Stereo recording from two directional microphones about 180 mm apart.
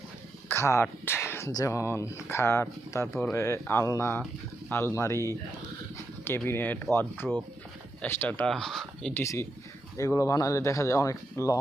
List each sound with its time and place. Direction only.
0.4 s speech: 15° left (ahead or behind)
9.2 s speech: 15° left (ahead or behind)